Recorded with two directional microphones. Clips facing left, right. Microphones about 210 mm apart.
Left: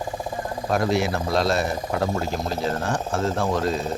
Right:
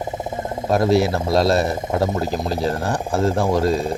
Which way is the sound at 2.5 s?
35° right (ahead or behind).